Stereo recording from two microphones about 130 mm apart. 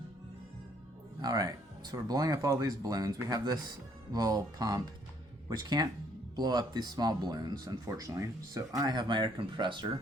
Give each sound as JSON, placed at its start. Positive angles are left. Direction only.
{"t": 1.2, "sound": "speech", "side_deg": -30}